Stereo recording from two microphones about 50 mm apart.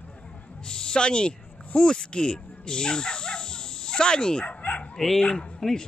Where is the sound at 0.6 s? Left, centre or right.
Centre.